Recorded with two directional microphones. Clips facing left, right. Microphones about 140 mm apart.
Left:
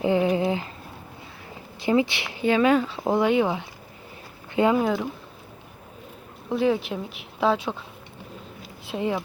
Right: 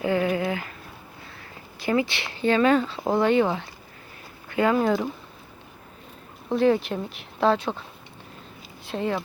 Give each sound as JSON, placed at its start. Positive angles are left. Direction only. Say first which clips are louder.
{"t": 0.0, "sound": "a sound", "louder": "left 2 dB", "side_deg": 20}
{"t": 1.8, "sound": "speech", "louder": "left 2 dB", "side_deg": 20}
{"t": 4.8, "sound": "speech", "louder": "right 1 dB", "side_deg": 0}
{"t": 6.5, "sound": "speech", "louder": "right 2 dB", "side_deg": 5}
{"t": 9.0, "sound": "speech", "louder": "even", "side_deg": 15}